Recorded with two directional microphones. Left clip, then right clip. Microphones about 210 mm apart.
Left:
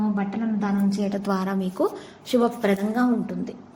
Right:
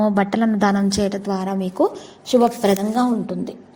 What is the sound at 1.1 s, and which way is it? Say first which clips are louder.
A woman's voice: right 2 dB; 10° right (ahead or behind).